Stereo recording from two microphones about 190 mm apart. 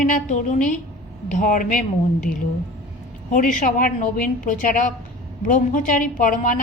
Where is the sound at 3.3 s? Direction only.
40° left (ahead or behind).